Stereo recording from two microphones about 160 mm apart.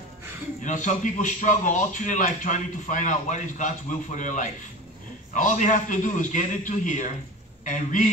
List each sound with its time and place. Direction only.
0.7 s a man's voice: 50° left (ahead or behind)